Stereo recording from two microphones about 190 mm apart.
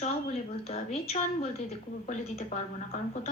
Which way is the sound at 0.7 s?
35° left (ahead or behind).